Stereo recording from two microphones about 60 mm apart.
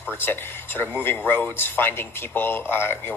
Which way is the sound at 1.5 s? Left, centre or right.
Left.